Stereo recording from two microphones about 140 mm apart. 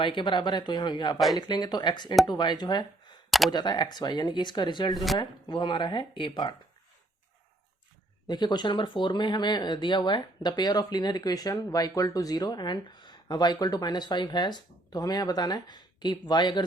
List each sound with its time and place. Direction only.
0.0 s speech: 35° left (ahead or behind)
3.2 s a sound: centre (ahead or behind)
3.5 s speech: 30° left (ahead or behind)
8.3 s speech: 30° left (ahead or behind)